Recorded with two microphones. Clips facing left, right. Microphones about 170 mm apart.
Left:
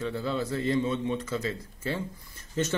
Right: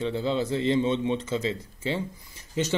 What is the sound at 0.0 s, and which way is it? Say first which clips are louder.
A man's voice: right 4 dB; 25° right (ahead or behind).